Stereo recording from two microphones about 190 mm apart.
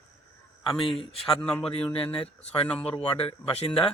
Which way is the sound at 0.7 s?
25° left (ahead or behind).